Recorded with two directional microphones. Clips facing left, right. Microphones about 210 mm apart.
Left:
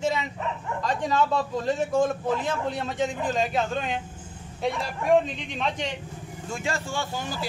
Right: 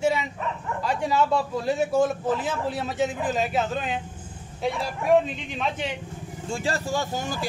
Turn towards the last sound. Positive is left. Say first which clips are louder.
# right 3 dB
turn(degrees=-45)  # may be behind; listen again after turning